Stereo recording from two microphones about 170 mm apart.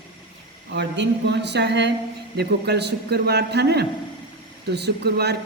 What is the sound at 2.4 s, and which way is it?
A man's voice, 75° right (ahead or behind).